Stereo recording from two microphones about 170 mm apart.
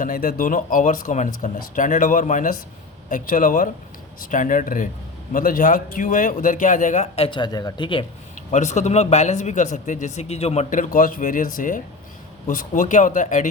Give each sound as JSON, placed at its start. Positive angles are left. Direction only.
{"t": 0.0, "sound": "speech", "side_deg": 55}
{"t": 7.3, "sound": "speech", "side_deg": 25}
{"t": 8.5, "sound": "speech", "side_deg": 45}